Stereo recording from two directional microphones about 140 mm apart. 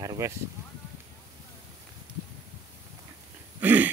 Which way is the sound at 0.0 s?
25° right (ahead or behind).